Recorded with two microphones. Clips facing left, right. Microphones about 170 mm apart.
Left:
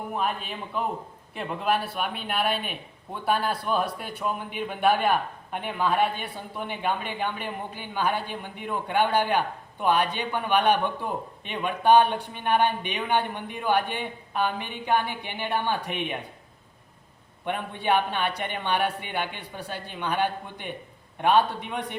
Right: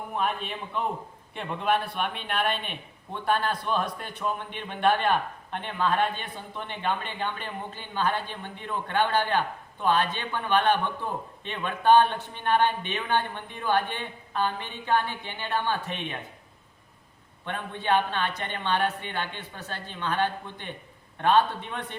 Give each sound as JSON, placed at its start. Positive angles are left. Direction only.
{"t": 0.1, "sound": "a man's voice", "side_deg": 0}
{"t": 17.4, "sound": "a man's voice", "side_deg": 15}